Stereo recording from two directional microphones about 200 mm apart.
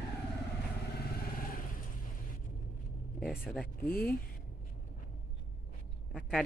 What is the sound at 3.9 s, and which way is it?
Speech, 45° left (ahead or behind).